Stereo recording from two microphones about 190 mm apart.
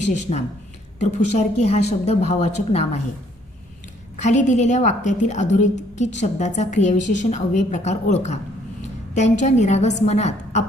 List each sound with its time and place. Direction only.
0.1 s a woman's voice: 35° left (ahead or behind)
4.2 s a woman's voice: 40° left (ahead or behind)